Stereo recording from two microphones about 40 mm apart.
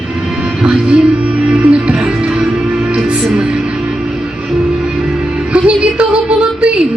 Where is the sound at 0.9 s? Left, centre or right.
Right.